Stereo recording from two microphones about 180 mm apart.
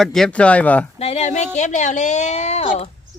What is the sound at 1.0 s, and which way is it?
A woman's voice, 35° left (ahead or behind).